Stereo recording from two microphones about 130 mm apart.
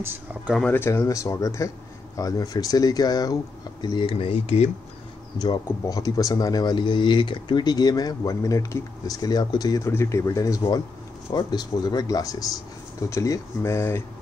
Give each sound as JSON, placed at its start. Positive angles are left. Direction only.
{"t": 0.0, "sound": "speech", "side_deg": -15}
{"t": 0.7, "sound": "speech", "side_deg": 20}
{"t": 5.4, "sound": "speech", "side_deg": 30}